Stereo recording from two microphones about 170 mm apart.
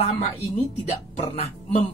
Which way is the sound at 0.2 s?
40° left (ahead or behind).